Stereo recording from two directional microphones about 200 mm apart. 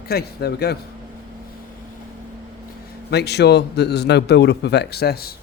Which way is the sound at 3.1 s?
55° left (ahead or behind).